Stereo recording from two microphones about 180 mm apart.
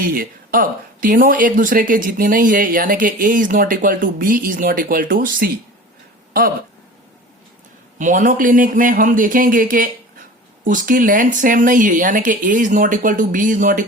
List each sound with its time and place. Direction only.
0.0 s speech: 50° right (ahead or behind)
7.9 s speech: 45° right (ahead or behind)